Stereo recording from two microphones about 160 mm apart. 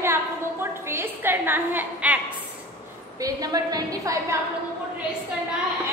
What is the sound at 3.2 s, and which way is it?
A woman's voice, 20° right (ahead or behind).